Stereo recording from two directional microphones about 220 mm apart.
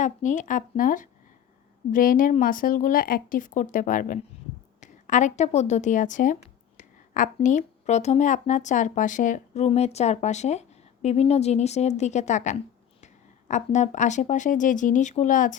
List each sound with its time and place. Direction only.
0.0 s a woman's voice: 35° left (ahead or behind)